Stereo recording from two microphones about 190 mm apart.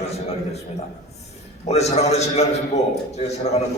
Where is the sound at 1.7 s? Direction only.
35° left (ahead or behind).